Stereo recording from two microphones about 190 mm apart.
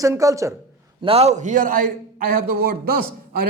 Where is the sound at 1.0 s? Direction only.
35° right (ahead or behind).